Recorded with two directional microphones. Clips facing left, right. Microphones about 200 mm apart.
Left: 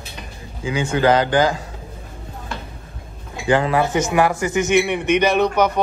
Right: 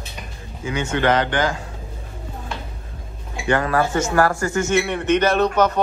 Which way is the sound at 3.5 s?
20° left (ahead or behind).